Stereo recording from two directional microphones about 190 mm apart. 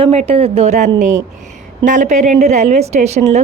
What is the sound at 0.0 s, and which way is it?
Speech, 35° right (ahead or behind).